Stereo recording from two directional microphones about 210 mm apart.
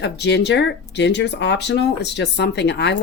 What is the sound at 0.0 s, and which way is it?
Speech, 55° left (ahead or behind).